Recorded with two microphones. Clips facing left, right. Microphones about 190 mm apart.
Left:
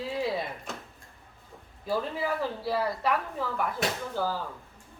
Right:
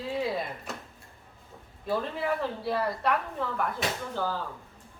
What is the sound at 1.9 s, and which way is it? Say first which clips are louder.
A woman's voice: even; centre (ahead or behind).